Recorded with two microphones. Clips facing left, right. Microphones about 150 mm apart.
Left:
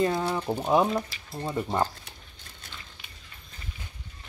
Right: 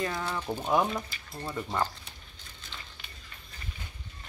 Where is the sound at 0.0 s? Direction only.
25° left (ahead or behind).